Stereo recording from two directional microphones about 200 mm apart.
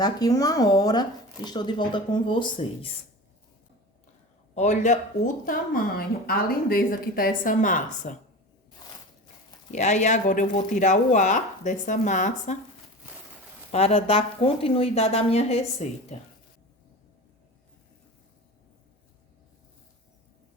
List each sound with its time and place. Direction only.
0.0 s speech: 20° left (ahead or behind)
4.5 s speech: 35° left (ahead or behind)
9.7 s speech: 35° left (ahead or behind)
13.7 s speech: 30° left (ahead or behind)